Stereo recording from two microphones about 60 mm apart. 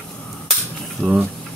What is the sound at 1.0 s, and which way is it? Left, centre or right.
Speech, centre.